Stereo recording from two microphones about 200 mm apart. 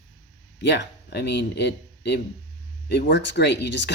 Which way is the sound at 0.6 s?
60° left (ahead or behind).